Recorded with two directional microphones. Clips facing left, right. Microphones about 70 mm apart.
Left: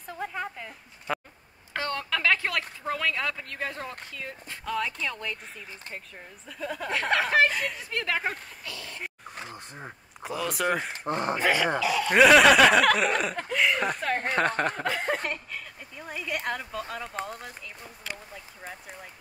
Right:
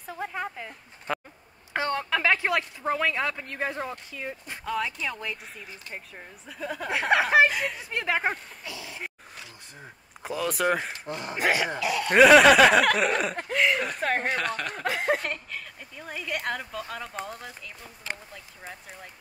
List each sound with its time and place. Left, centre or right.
0.0 s a sound: centre
1.1 s a sound: centre
1.7 s speech: centre
4.6 s speech: centre
7.9 s speech: right
9.4 s a sound: left
10.2 s speech: centre
11.1 s speech: left
11.3 s speech: centre
13.6 s a sound: centre
14.3 s speech: left
14.9 s speech: centre
15.2 s speech: centre
18.6 s speech: centre